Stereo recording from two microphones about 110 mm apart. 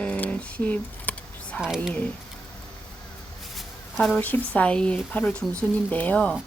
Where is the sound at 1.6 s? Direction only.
5° right (ahead or behind).